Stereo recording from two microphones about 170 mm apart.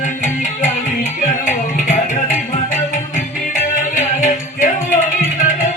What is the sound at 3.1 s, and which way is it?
Music, 50° left (ahead or behind).